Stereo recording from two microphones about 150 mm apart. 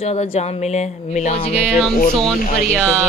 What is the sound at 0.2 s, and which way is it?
Speech, 45° left (ahead or behind).